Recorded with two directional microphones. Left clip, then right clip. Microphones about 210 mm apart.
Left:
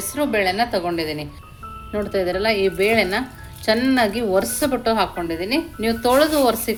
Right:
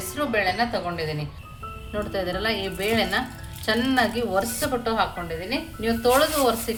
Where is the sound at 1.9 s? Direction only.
30° left (ahead or behind).